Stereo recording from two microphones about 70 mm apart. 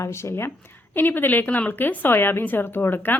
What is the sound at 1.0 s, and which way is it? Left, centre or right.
A woman's voice, left.